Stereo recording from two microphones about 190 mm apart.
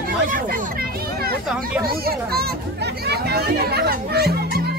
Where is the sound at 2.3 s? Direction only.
55° right (ahead or behind).